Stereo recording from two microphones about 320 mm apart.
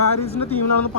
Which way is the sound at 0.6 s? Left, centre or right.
Left.